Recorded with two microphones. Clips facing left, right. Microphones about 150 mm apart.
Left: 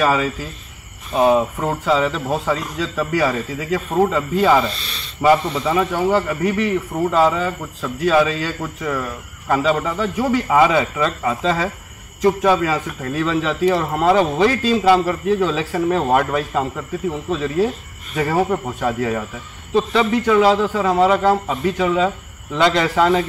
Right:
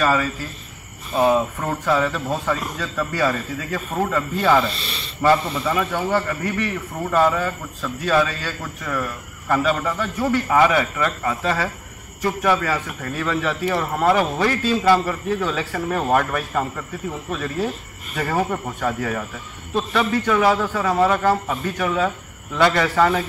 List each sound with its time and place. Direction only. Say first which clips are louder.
0.0 s speech: left 2 dB; 15° left (ahead or behind)
4.6 s speech: left 1 dB; centre (ahead or behind)
5.6 s speech: left 4 dB; 10° left (ahead or behind)